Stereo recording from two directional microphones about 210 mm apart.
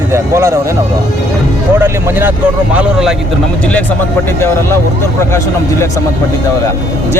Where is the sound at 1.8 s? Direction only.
10° right (ahead or behind).